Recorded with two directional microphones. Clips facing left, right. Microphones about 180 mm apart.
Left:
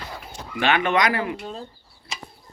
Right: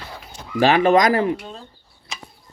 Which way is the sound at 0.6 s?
35° right (ahead or behind).